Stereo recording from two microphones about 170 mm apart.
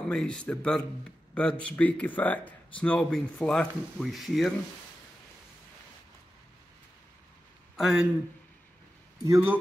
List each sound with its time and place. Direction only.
0.1 s speech: 5° left (ahead or behind)
7.7 s a sound: centre (ahead or behind)
9.2 s speech: 15° right (ahead or behind)